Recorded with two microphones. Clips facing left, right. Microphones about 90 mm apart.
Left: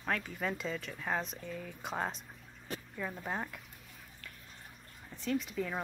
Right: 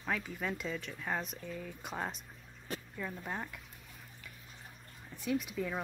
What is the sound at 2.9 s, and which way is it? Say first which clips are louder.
Speech: left 3 dB; 10° left (ahead or behind).